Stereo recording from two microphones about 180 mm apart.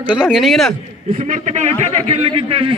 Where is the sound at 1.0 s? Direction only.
40° right (ahead or behind).